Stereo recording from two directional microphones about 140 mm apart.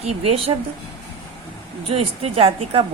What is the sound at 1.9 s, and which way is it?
Speech, 45° right (ahead or behind).